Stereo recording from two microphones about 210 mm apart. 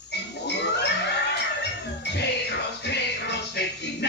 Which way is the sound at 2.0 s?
55° left (ahead or behind).